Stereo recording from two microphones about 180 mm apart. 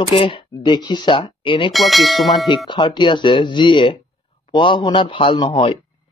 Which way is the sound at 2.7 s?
25° left (ahead or behind).